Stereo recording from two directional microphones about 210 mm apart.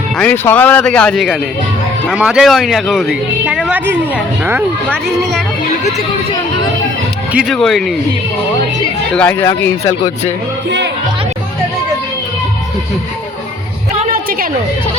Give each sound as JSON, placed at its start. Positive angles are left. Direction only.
{"t": 0.2, "sound": "speech", "side_deg": 10}
{"t": 4.9, "sound": "speech", "side_deg": 0}
{"t": 7.3, "sound": "speech", "side_deg": 0}
{"t": 9.1, "sound": "speech", "side_deg": 5}
{"t": 14.0, "sound": "a sound", "side_deg": -45}